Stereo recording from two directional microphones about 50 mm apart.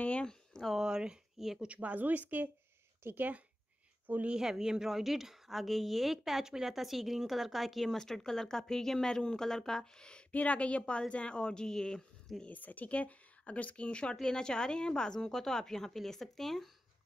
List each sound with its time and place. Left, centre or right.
0.2 s a sound: centre
0.7 s speech: centre
1.6 s speech: right
4.4 s a woman's voice: centre
10.3 s a woman's voice: left
12.4 s a woman's voice: left; by 16.7 s centre